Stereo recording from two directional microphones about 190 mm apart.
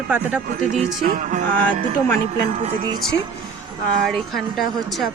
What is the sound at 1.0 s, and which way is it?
Music, 45° right (ahead or behind).